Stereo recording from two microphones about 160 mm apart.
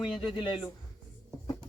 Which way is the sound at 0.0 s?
30° left (ahead or behind).